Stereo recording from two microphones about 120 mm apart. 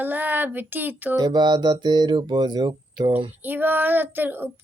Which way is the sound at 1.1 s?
35° right (ahead or behind).